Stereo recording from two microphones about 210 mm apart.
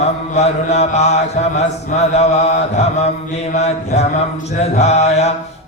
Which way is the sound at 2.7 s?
30° left (ahead or behind).